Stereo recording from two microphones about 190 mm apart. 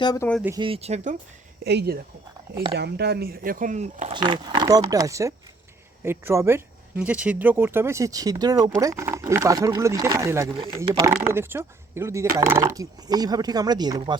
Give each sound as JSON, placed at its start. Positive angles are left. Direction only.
{"t": 0.0, "sound": "speech", "side_deg": 20}
{"t": 0.6, "sound": "speech", "side_deg": -30}
{"t": 1.6, "sound": "speech", "side_deg": -60}
{"t": 4.1, "sound": "speech", "side_deg": -25}
{"t": 10.5, "sound": "speech", "side_deg": -25}
{"t": 10.8, "sound": "speech", "side_deg": -15}